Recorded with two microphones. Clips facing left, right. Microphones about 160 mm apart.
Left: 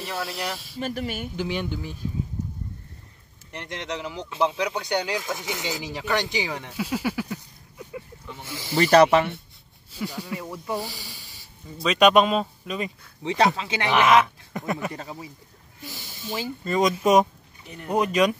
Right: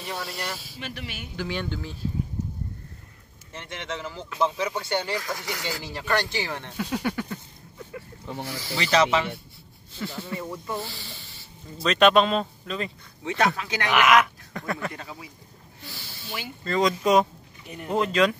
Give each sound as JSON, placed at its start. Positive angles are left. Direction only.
{"t": 0.0, "sound": "speech", "side_deg": 0}
{"t": 0.7, "sound": "speech", "side_deg": 40}
{"t": 1.3, "sound": "speech", "side_deg": 15}
{"t": 4.3, "sound": "speech", "side_deg": 15}
{"t": 8.5, "sound": "speech", "side_deg": 20}
{"t": 8.7, "sound": "speech", "side_deg": 50}
{"t": 9.9, "sound": "speech", "side_deg": 10}
{"t": 13.2, "sound": "speech", "side_deg": 20}
{"t": 15.0, "sound": "speech", "side_deg": 40}
{"t": 15.8, "sound": "snake", "side_deg": 15}
{"t": 16.6, "sound": "speech", "side_deg": 20}
{"t": 17.6, "sound": "speech", "side_deg": -5}
{"t": 17.9, "sound": "speech", "side_deg": 15}